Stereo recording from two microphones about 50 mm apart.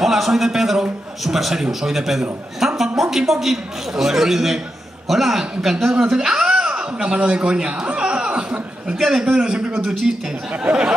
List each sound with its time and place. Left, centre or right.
0.0 s a man's voice: centre
2.6 s a sound: centre
3.0 s a man's voice: centre
5.9 s a sound: centre
8.9 s a man's voice: centre
9.2 s a man's voice: centre
9.8 s a man's voice: centre
10.5 s speech: right